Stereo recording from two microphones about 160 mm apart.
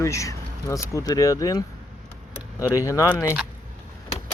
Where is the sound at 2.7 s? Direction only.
20° left (ahead or behind).